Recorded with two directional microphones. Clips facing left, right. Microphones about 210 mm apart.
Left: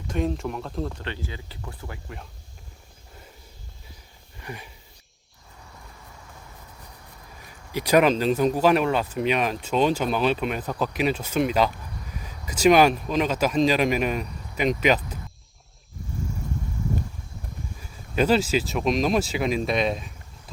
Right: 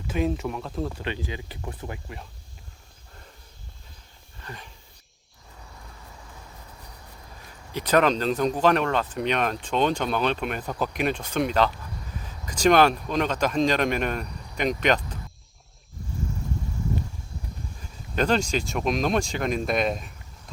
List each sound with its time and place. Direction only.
0.1 s speech: 5° right (ahead or behind)
1.0 s speech: 15° right (ahead or behind)
4.4 s a sound: 10° left (ahead or behind)
7.7 s speech: 10° left (ahead or behind)
18.1 s speech: 5° left (ahead or behind)